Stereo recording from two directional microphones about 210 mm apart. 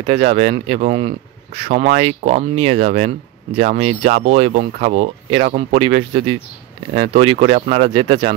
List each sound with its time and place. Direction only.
0.0 s speech: 30° right (ahead or behind)